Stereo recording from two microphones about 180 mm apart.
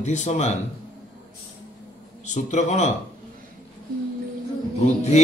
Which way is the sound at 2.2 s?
40° left (ahead or behind).